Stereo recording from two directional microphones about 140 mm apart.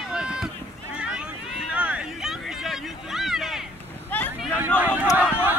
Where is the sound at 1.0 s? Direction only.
5° right (ahead or behind).